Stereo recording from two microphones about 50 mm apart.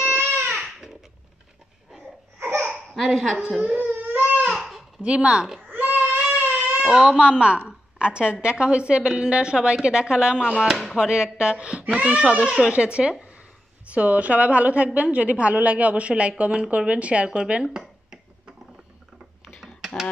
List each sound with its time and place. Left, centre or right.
0.0 s crying: right
0.5 s a sound: centre
2.6 s baby laughter: centre
3.3 s speech: centre
3.7 s crying: right
4.6 s babbling: centre
5.0 s a woman's voice: right
5.7 s baby cry: right
6.8 s a woman's voice: centre
17.6 s a sound: centre